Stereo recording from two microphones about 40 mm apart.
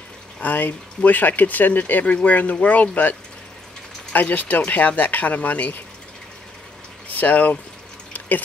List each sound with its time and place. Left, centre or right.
0.4 s speech: left
7.1 s speech: left